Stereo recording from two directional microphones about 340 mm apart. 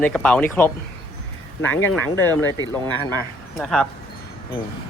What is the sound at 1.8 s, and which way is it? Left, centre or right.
Speech, centre.